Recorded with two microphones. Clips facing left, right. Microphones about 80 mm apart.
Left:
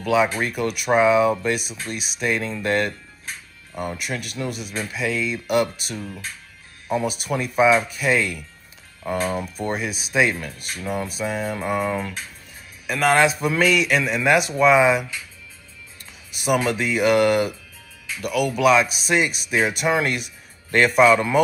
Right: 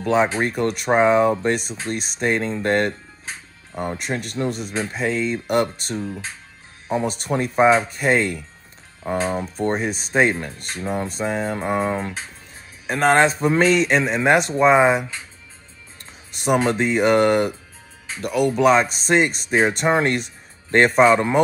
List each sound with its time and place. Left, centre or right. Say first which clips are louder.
0.0 s speech: right 1 dB; right
4.5 s speech: right 4 dB; centre
4.7 s speech: right 1 dB; right
16.4 s speech: right 2 dB; right